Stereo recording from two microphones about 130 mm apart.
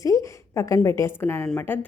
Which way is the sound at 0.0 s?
25° left (ahead or behind).